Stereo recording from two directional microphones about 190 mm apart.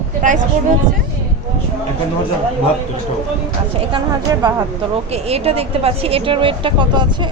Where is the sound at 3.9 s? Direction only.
25° right (ahead or behind).